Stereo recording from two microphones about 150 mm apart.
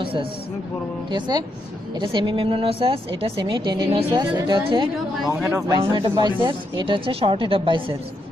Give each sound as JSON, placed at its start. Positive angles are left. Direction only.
{"t": 0.0, "sound": "a sound", "side_deg": -35}
{"t": 1.1, "sound": "speech", "side_deg": -30}
{"t": 5.3, "sound": "speech", "side_deg": -15}
{"t": 5.8, "sound": "speech", "side_deg": -30}